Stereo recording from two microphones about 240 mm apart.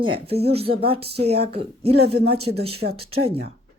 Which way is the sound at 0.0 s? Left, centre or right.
Right.